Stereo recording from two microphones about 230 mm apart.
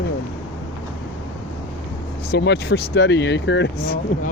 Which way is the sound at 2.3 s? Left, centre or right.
Left.